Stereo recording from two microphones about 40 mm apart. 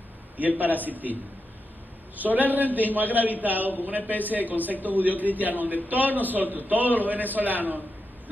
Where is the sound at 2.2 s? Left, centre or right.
Right.